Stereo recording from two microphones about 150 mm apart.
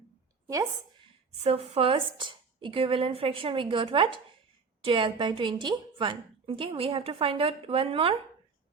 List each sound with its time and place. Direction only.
0.4 s a woman's voice: 20° right (ahead or behind)
1.5 s a woman's voice: 40° right (ahead or behind)